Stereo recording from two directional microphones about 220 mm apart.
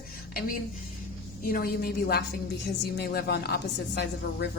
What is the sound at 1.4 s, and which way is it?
A woman's voice, 40° left (ahead or behind).